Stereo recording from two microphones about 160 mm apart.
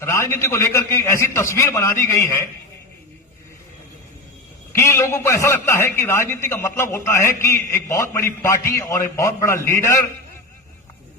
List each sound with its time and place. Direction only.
0.0 s a man's voice: 15° left (ahead or behind)
4.7 s a man's voice: 15° left (ahead or behind)